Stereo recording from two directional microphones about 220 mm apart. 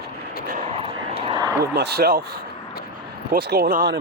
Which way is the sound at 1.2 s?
20° right (ahead or behind).